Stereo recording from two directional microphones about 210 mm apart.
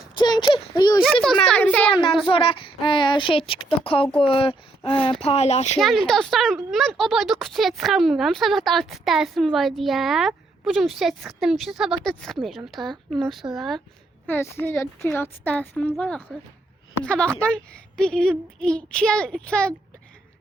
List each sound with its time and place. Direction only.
0.2 s speech: 20° left (ahead or behind)
1.0 s speech: centre (ahead or behind)
1.9 s speech: 25° left (ahead or behind)
5.7 s speech: centre (ahead or behind)
14.3 s speech: 10° left (ahead or behind)